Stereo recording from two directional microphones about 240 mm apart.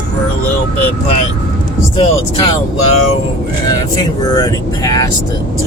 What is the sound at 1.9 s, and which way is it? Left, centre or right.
Speech, left.